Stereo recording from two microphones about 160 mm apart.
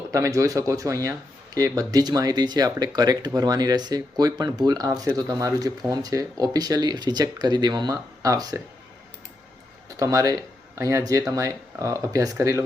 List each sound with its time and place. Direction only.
0.1 s speech: 20° right (ahead or behind)
10.0 s speech: 20° right (ahead or behind)